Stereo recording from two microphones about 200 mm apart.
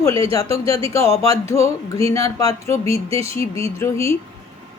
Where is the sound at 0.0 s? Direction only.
15° left (ahead or behind).